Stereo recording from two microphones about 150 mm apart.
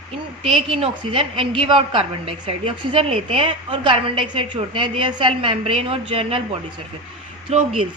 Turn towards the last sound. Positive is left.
turn(degrees=-45)  # may be behind; listen again after turning